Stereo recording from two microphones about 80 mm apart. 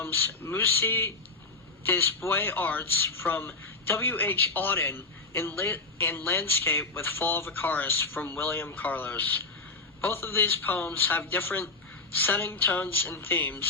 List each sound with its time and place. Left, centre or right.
0.0 s a man's voice: left